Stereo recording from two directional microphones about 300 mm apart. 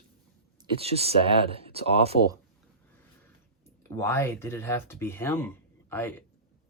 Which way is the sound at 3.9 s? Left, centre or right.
Centre.